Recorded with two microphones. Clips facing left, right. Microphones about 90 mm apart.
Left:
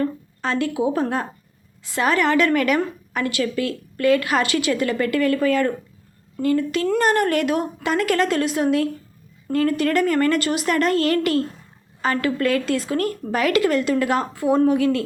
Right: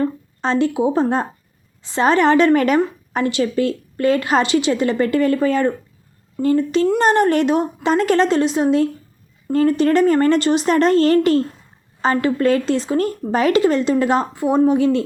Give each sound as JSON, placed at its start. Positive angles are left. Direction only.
{"t": 0.0, "sound": "a woman's voice", "side_deg": -25}